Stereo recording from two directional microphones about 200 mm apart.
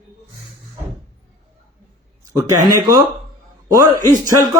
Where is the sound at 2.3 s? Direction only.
15° right (ahead or behind).